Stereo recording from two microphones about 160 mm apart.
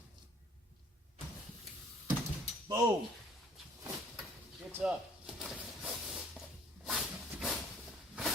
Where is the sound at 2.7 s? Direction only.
20° right (ahead or behind).